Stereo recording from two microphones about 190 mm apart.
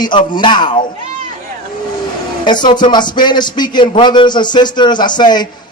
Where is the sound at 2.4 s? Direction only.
25° left (ahead or behind).